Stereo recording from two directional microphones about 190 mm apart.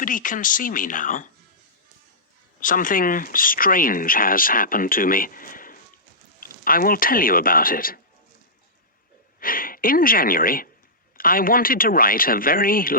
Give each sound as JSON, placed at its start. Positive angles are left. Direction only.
{"t": 0.0, "sound": "speech", "side_deg": 45}
{"t": 2.6, "sound": "speech", "side_deg": 45}
{"t": 9.4, "sound": "speech", "side_deg": 50}